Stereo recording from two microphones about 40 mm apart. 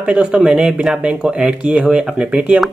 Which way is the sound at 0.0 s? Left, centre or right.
Right.